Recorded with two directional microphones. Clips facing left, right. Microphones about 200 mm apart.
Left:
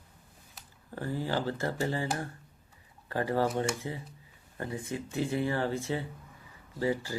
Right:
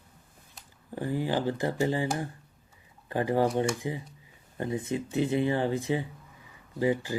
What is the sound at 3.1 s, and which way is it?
Speech, 15° right (ahead or behind).